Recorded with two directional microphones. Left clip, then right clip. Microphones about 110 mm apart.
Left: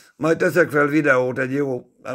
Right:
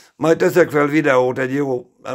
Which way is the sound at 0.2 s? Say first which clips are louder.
Right 3 dB; 25° right (ahead or behind).